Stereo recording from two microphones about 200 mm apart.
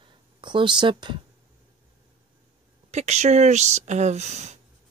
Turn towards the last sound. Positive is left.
turn(degrees=-35)  # may be behind; listen again after turning